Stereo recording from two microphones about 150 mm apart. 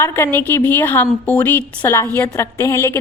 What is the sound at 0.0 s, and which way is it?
A woman's voice, 15° left (ahead or behind).